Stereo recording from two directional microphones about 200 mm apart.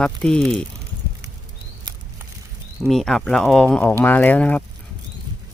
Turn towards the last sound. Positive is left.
turn(degrees=10)  # may be behind; listen again after turning